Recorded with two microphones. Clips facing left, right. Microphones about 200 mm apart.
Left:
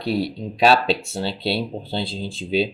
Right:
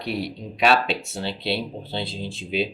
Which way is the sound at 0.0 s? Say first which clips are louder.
Left 5 dB; 30° left (ahead or behind).